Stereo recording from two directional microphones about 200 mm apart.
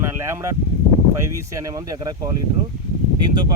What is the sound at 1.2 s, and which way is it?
Speech, 15° right (ahead or behind).